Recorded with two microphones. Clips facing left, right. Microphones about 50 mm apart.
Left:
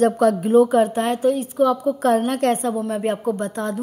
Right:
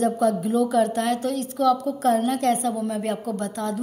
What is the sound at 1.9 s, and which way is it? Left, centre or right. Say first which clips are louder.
A woman's voice: left 3 dB; left.